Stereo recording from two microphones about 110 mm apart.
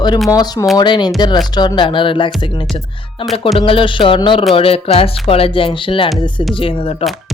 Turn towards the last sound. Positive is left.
turn(degrees=55)  # may be behind; listen again after turning